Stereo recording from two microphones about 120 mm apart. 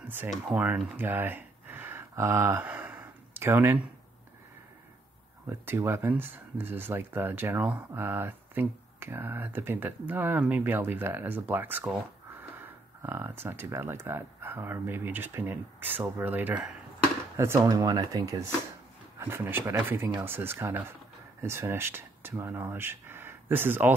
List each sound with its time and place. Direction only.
0.9 s a sound: 15° right (ahead or behind)
5.5 s speech: 20° right (ahead or behind)
17.4 s speech: 25° right (ahead or behind)
19.1 s speech: 20° right (ahead or behind)